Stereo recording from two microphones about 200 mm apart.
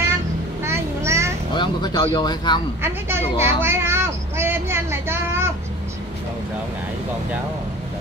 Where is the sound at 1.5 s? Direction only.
20° left (ahead or behind).